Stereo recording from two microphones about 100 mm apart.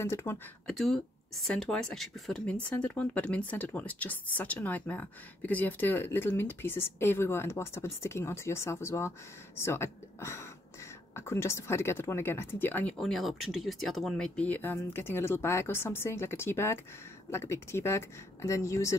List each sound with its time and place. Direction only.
0.0 s speech: 25° left (ahead or behind)
0.7 s speech: 5° left (ahead or behind); by 12.9 s 20° left (ahead or behind)
12.9 s speech: 5° left (ahead or behind); by 18.9 s 30° left (ahead or behind)